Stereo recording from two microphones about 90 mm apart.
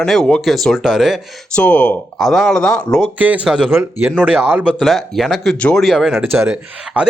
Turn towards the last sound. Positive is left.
turn(degrees=-10)  # may be behind; listen again after turning